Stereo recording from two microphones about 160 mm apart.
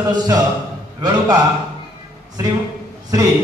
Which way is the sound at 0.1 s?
25° right (ahead or behind).